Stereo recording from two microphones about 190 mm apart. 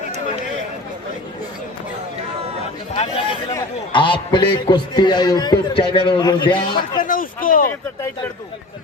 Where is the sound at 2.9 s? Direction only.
30° left (ahead or behind).